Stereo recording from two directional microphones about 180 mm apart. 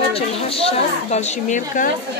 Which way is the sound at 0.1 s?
30° left (ahead or behind).